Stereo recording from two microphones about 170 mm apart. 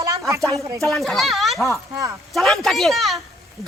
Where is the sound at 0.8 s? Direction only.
Centre (ahead or behind).